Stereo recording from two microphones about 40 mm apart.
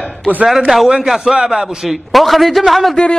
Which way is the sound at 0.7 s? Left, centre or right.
Centre.